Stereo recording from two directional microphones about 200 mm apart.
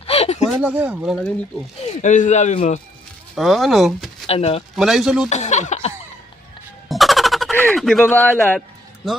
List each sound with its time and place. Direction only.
0.0 s a sound: 30° left (ahead or behind)
0.4 s speech: 5° right (ahead or behind)
1.8 s speech: 35° left (ahead or behind)
3.3 s speech: centre (ahead or behind)
4.3 s speech: 30° left (ahead or behind)
4.7 s speech: centre (ahead or behind)
5.3 s chuckle: 35° left (ahead or behind)
6.8 s a sound: centre (ahead or behind)